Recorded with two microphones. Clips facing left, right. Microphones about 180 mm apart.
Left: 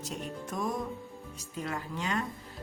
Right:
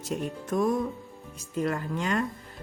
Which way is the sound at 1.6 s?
50° right (ahead or behind).